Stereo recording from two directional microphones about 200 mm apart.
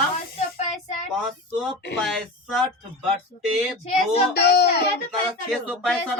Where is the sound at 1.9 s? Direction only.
Centre (ahead or behind).